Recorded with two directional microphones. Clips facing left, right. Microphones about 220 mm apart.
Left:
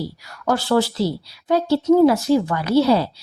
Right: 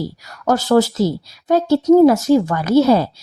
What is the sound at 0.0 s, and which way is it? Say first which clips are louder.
Speech: right 3 dB; 45° right (ahead or behind).